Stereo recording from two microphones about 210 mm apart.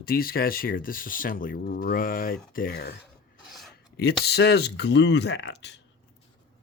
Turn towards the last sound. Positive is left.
turn(degrees=55)  # may be behind; listen again after turning